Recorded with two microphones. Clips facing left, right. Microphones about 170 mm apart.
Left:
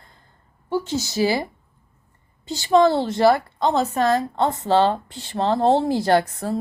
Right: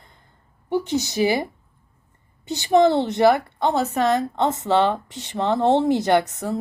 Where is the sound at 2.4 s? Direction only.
20° right (ahead or behind).